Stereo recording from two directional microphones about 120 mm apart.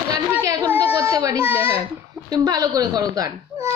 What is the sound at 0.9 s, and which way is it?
Speech, 30° right (ahead or behind).